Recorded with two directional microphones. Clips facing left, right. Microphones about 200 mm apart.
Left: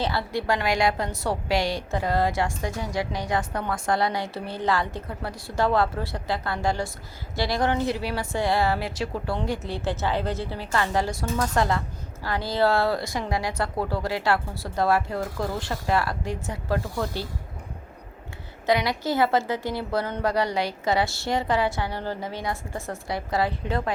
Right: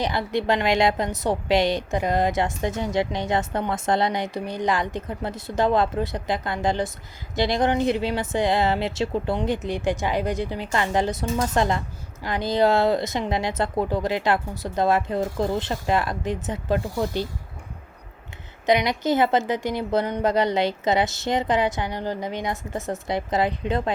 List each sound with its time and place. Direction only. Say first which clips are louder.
0.0 s a woman's voice: right 3 dB; 20° right (ahead or behind)
18.6 s a woman's voice: right 3 dB; 20° right (ahead or behind)